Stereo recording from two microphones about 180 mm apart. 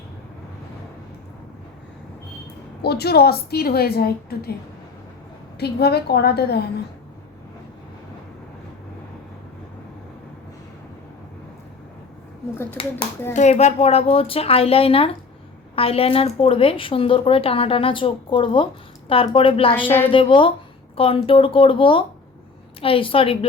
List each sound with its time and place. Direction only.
2.8 s a woman's voice: 60° left (ahead or behind)
5.5 s a woman's voice: 65° left (ahead or behind)
13.3 s a woman's voice: 40° left (ahead or behind)